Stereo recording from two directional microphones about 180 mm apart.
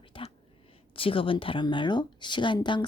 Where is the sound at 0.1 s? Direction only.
25° left (ahead or behind).